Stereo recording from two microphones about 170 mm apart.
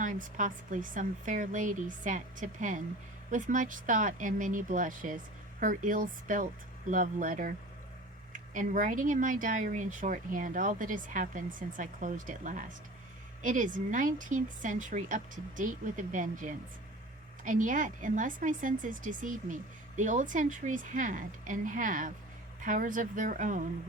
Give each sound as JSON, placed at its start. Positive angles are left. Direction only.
{"t": 0.0, "sound": "speech", "side_deg": -50}